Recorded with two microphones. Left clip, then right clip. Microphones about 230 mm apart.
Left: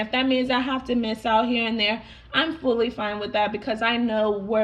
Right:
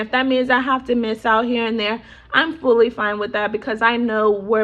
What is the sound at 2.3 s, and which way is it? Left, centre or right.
Speech, centre.